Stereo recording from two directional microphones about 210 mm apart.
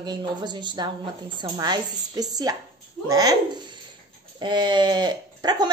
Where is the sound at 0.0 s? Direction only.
20° right (ahead or behind).